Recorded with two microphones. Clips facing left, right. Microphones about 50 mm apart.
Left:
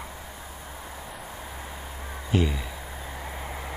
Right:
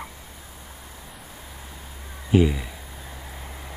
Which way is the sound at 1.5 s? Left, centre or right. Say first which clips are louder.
Left 4 dB; left.